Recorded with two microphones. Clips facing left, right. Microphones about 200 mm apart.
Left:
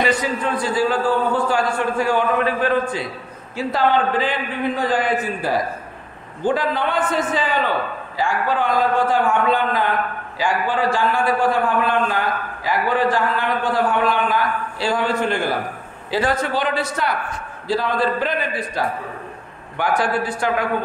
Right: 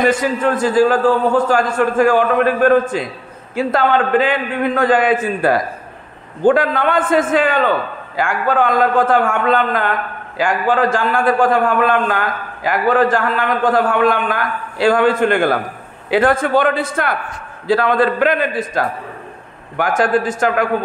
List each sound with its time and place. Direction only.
0.0 s a man's voice: 50° right (ahead or behind)
10.3 s a man's voice: 50° right (ahead or behind)